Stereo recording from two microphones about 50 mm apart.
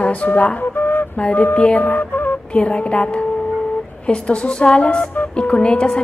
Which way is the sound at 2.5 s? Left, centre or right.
Left.